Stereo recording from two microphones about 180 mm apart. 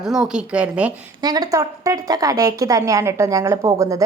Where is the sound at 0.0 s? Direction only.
Centre (ahead or behind).